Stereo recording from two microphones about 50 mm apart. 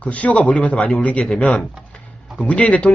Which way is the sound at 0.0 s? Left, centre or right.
Left.